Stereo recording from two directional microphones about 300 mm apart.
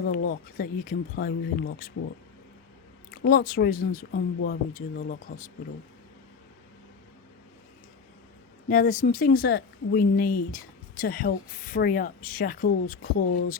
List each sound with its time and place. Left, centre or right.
0.0 s speech: left
3.1 s speech: left
8.7 s speech: left